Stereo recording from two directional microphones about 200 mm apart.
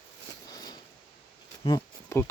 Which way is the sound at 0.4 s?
20° left (ahead or behind).